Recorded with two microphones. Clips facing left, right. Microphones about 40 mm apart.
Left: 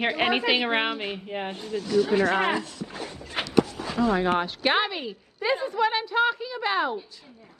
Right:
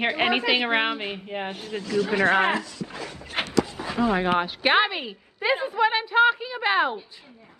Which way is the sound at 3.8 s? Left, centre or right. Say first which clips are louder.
Even; centre.